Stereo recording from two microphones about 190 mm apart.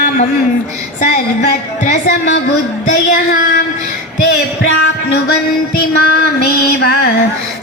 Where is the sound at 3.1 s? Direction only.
45° left (ahead or behind).